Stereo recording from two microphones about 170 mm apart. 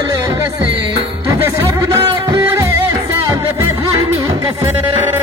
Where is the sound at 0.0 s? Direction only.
25° right (ahead or behind).